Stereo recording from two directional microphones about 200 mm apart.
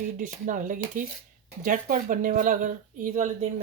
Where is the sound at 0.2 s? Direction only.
40° right (ahead or behind).